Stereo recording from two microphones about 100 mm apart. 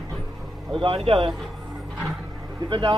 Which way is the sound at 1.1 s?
60° right (ahead or behind).